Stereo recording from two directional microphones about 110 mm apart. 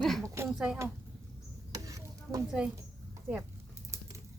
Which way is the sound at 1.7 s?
30° right (ahead or behind).